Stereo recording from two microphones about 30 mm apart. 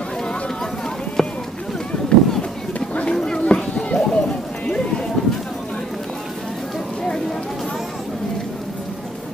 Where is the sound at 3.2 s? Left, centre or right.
Left.